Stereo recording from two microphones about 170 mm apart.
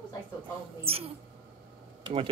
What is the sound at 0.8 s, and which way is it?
Speech, 35° right (ahead or behind).